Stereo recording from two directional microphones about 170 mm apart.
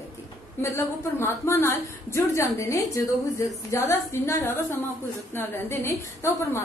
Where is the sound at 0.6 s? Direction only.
15° left (ahead or behind).